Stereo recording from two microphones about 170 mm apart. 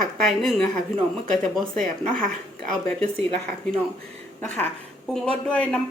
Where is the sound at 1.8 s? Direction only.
50° right (ahead or behind).